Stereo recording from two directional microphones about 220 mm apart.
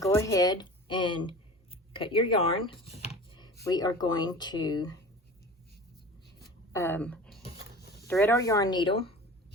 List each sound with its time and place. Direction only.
0.0 s a woman's voice: 15° left (ahead or behind)
6.7 s speech: 10° left (ahead or behind)